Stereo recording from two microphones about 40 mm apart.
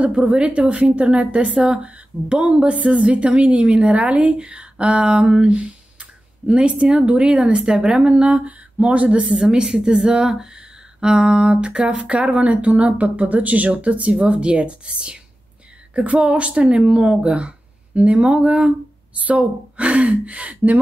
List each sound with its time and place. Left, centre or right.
0.0 s a woman's voice: right
5.5 s speech: right
9.3 s a woman's voice: right
12.1 s a woman's voice: right